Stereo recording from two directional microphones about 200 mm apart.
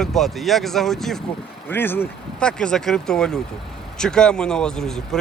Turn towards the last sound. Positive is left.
turn(degrees=0)  # may be behind; listen again after turning